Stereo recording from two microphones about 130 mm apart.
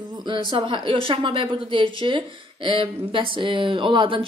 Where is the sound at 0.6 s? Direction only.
40° right (ahead or behind).